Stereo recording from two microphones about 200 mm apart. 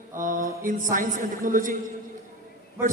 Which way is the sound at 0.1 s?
40° right (ahead or behind).